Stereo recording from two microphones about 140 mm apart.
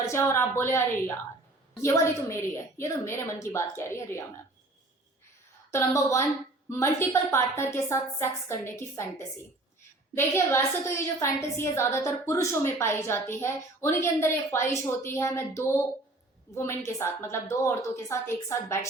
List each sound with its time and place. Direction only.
0.0 s a woman's voice: 20° left (ahead or behind)
5.7 s a woman's voice: 20° left (ahead or behind)